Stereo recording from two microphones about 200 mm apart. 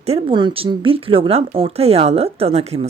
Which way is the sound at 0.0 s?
30° right (ahead or behind).